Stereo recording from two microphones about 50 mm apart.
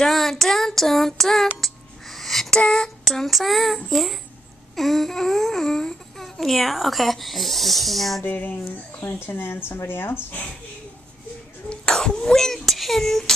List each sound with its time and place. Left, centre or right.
0.0 s child singing: centre
2.5 s speech: centre
8.2 s a sound: left
9.0 s speech: left
11.7 s speech: centre